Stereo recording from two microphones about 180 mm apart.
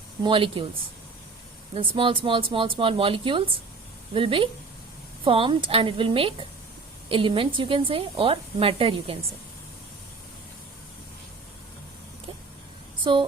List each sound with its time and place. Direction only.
0.2 s speech: 30° right (ahead or behind)
1.7 s a woman's voice: 30° right (ahead or behind)